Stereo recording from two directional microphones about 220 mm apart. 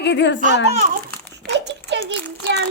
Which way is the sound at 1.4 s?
50° right (ahead or behind).